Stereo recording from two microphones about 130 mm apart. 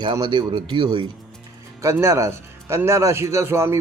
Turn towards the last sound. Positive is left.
turn(degrees=-20)  # may be behind; listen again after turning